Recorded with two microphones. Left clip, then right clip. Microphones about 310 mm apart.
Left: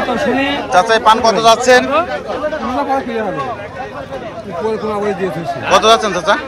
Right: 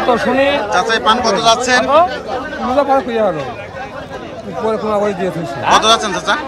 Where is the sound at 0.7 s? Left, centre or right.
Centre.